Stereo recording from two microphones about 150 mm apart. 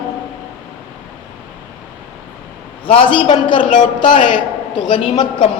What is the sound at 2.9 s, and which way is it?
A man's voice, 35° left (ahead or behind).